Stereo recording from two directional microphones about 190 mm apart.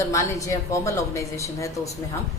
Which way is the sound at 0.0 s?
15° left (ahead or behind).